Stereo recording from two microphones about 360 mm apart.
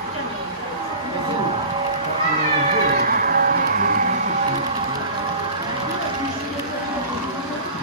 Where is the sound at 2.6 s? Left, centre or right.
Right.